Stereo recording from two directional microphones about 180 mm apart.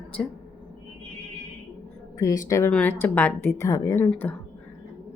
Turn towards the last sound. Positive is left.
turn(degrees=10)  # may be behind; listen again after turning